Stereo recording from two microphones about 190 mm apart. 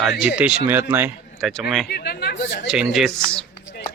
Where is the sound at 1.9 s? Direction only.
60° left (ahead or behind).